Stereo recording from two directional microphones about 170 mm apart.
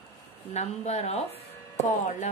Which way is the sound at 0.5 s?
40° left (ahead or behind).